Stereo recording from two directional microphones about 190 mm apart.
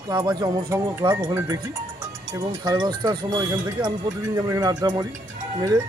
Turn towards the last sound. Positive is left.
turn(degrees=-15)  # may be behind; listen again after turning